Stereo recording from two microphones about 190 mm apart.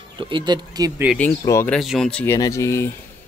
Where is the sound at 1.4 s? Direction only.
15° left (ahead or behind).